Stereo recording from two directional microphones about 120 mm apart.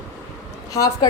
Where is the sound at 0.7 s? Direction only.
30° left (ahead or behind).